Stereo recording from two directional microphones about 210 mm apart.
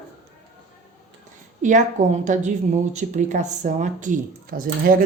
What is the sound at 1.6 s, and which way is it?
Speech, 35° right (ahead or behind).